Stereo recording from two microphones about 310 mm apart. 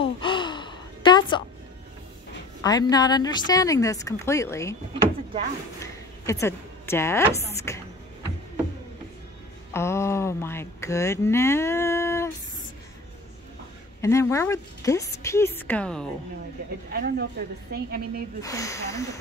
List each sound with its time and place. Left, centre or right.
0.0 s gasp: centre
2.6 s speech: centre
6.2 s a woman's voice: centre
9.7 s speech: centre
14.0 s speech: centre
16.9 s a woman's voice: right
18.4 s speech: centre